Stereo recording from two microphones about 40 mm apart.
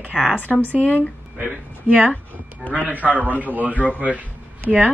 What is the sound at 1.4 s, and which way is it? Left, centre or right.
A man's voice, right.